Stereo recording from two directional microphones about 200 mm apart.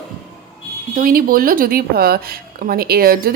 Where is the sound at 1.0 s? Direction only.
45° right (ahead or behind).